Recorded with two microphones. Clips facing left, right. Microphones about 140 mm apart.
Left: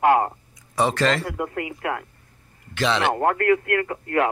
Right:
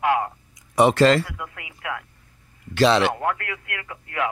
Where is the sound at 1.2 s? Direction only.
45° left (ahead or behind).